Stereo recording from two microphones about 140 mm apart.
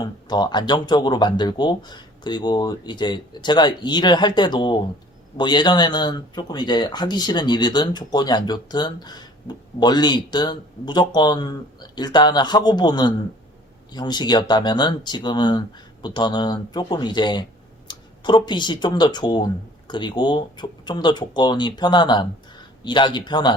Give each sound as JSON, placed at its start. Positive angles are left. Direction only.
{"t": 0.0, "sound": "speech", "side_deg": 30}